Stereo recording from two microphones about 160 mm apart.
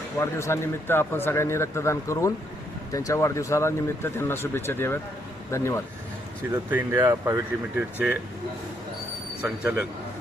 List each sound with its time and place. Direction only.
0.2 s a man's voice: 20° left (ahead or behind)
6.7 s speech: 10° right (ahead or behind)
7.0 s speech: 20° right (ahead or behind)
7.9 s speech: 10° right (ahead or behind)
9.4 s speech: 10° right (ahead or behind)